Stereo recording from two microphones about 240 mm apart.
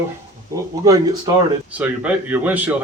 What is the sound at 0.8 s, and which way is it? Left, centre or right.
Speech, centre.